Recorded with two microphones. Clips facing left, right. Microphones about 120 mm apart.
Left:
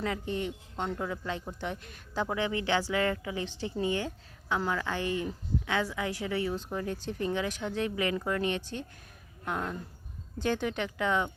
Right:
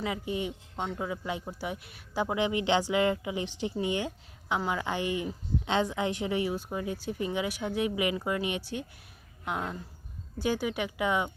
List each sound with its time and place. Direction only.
0.0 s speech: 10° right (ahead or behind)